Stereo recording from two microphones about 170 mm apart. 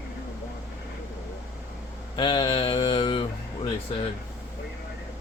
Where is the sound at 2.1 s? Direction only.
30° left (ahead or behind).